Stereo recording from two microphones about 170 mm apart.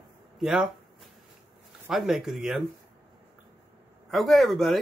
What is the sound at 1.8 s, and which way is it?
Speech, centre (ahead or behind).